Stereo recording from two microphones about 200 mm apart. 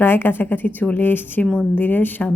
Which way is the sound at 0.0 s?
10° left (ahead or behind).